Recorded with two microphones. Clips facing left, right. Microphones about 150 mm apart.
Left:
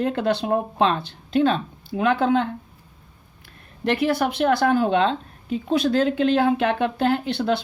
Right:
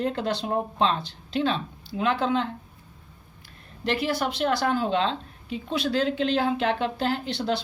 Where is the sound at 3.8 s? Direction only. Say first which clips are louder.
Left 5 dB; 55° left (ahead or behind).